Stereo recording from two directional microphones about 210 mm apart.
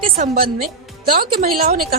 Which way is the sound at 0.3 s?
45° right (ahead or behind).